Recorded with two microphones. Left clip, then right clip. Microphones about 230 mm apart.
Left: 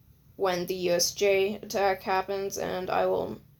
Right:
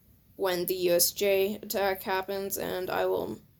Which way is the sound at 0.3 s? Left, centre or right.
Right.